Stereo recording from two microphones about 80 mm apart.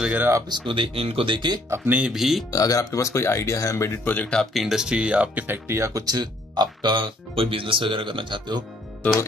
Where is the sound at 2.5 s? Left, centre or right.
Left.